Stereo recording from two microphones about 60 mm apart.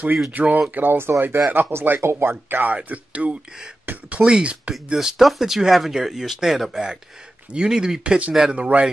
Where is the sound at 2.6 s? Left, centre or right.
Right.